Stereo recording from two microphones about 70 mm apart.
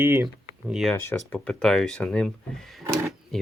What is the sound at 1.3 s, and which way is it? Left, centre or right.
Speech, centre.